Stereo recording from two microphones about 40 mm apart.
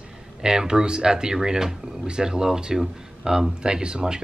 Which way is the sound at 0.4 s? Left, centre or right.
Centre.